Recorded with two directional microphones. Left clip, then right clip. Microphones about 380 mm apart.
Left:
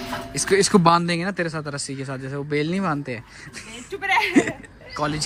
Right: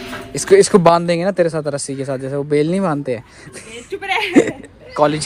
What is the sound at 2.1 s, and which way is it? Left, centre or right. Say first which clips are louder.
Speech: right 12 dB; right.